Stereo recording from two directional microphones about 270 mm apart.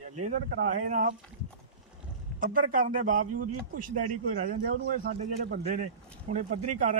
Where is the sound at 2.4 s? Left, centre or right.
Right.